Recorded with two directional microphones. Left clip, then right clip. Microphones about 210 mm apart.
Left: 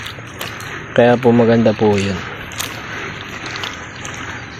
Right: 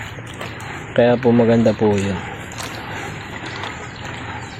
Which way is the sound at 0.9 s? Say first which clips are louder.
Left 3 dB; 15° left (ahead or behind).